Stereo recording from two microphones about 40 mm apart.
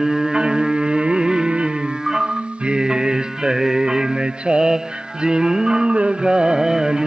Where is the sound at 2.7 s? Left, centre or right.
Centre.